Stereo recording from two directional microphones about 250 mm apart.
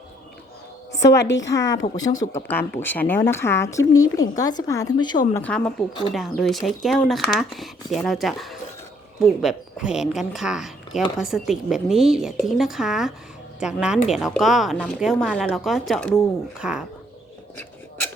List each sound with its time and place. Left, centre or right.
0.9 s a woman's voice: left
1.5 s speech: centre
5.9 s speech: left
6.1 s speech: centre